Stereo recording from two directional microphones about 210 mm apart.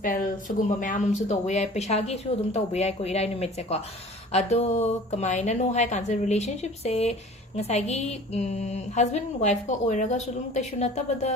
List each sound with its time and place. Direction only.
0.0 s a woman's voice: 40° left (ahead or behind)